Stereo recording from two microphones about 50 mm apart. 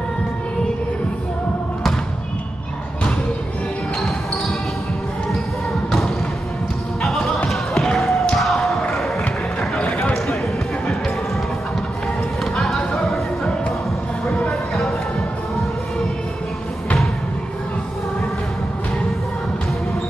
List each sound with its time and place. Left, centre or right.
5.9 s basketball bounce: centre
7.0 s music: centre
7.4 s a sound: centre
12.5 s basketball bounce: centre